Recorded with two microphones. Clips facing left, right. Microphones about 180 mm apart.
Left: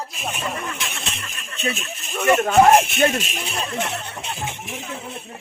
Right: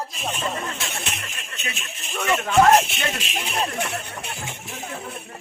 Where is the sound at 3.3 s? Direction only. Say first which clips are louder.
Right 2 dB; 40° right (ahead or behind).